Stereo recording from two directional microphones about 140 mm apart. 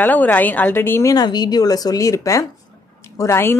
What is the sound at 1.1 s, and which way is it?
A woman's voice, 30° left (ahead or behind).